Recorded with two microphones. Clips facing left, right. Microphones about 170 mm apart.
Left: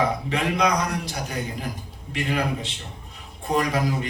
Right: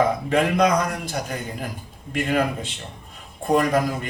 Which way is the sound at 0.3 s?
50° right (ahead or behind).